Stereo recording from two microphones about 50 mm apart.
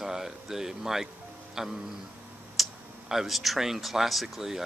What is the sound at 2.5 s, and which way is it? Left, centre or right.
Speech, centre.